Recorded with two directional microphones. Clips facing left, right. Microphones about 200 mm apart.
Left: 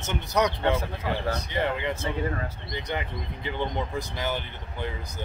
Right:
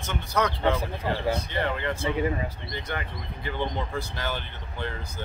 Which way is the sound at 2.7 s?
20° left (ahead or behind).